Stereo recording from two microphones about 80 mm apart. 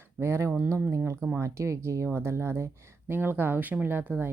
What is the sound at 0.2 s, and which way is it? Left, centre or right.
Speech, right.